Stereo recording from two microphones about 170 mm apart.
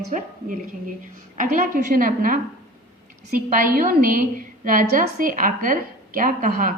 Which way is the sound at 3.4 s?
55° right (ahead or behind).